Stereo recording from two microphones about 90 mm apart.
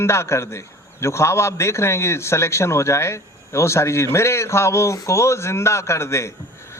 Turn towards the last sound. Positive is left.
turn(degrees=30)  # may be behind; listen again after turning